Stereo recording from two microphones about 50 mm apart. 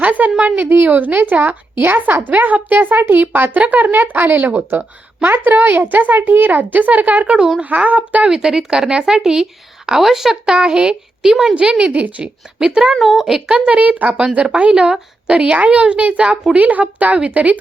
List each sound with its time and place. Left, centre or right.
0.0 s a sound: right
0.7 s a woman's voice: right
8.3 s speech: centre
10.5 s speech: centre
11.8 s a woman's voice: right
12.2 s a woman's voice: centre
12.9 s speech: centre
13.5 s a woman's voice: right